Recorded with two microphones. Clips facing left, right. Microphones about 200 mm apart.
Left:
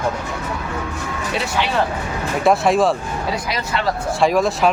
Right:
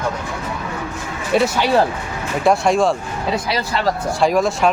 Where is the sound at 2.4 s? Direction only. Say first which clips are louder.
Even; centre (ahead or behind).